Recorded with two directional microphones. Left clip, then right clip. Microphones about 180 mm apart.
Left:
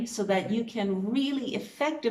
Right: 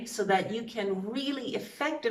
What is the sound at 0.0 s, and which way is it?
A woman's voice, 15° left (ahead or behind).